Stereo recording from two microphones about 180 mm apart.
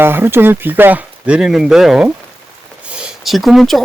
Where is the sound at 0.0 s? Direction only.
10° right (ahead or behind).